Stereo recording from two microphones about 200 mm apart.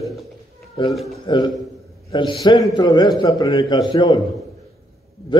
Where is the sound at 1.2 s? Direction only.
25° left (ahead or behind).